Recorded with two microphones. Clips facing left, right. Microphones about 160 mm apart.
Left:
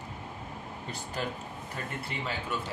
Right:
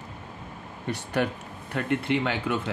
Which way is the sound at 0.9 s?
70° right (ahead or behind).